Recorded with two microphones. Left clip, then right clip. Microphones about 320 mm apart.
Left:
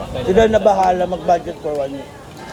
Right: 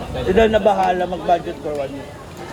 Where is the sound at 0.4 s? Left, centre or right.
Left.